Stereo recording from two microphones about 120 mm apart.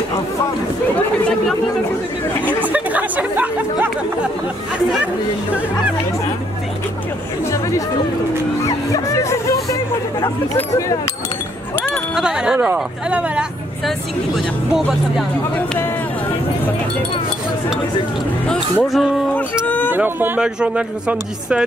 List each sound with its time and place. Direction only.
2.6 s chatter: 15° right (ahead or behind)
8.6 s music: 30° left (ahead or behind)
12.2 s speech: 5° right (ahead or behind)
18.5 s speech: 5° left (ahead or behind)
19.5 s a sound: 15° left (ahead or behind)
19.9 s speech: 15° right (ahead or behind)